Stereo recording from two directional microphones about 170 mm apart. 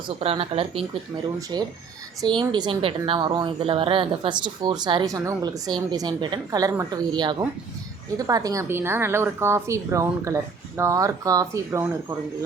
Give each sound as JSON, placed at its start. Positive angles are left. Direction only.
{"t": 0.2, "sound": "speech", "side_deg": -35}
{"t": 1.5, "sound": "a woman's voice", "side_deg": -25}